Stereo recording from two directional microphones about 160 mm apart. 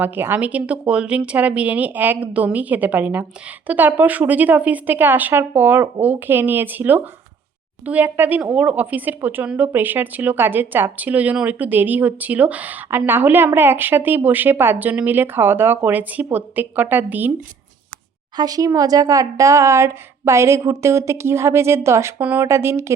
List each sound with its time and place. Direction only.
0.0 s speech: 10° right (ahead or behind)
18.3 s speech: 25° right (ahead or behind)